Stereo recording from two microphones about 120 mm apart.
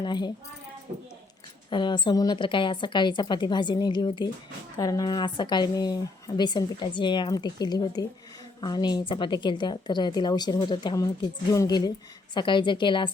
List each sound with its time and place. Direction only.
0.0 s speech: 40° left (ahead or behind)
1.7 s speech: 40° left (ahead or behind)